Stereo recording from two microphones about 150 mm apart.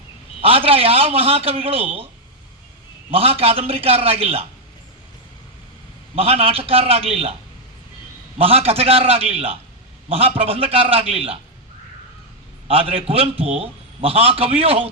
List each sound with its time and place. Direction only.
0.4 s a man's voice: 40° right (ahead or behind)
3.1 s a man's voice: 40° right (ahead or behind)
6.1 s a man's voice: 40° right (ahead or behind)
8.4 s a man's voice: 40° right (ahead or behind)
12.6 s a man's voice: 40° right (ahead or behind)